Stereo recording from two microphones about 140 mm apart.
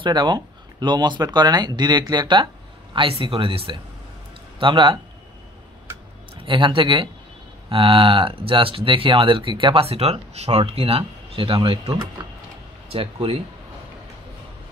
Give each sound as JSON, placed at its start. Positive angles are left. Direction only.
{"t": 0.0, "sound": "speech", "side_deg": -30}
{"t": 6.4, "sound": "speech", "side_deg": -35}